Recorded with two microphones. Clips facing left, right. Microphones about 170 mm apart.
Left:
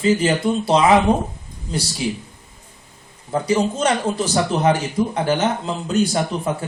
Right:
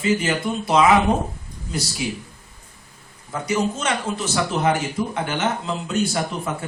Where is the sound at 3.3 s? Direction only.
30° left (ahead or behind).